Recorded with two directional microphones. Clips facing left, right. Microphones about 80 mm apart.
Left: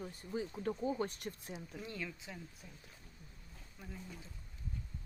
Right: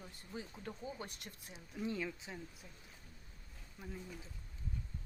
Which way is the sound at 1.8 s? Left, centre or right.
Centre.